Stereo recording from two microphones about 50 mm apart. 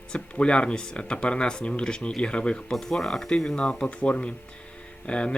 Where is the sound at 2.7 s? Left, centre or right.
Centre.